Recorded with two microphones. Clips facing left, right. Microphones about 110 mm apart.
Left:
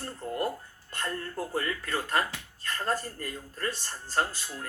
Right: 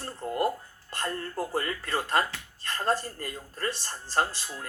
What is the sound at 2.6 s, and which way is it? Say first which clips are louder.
Speech: right 3 dB; 30° right (ahead or behind).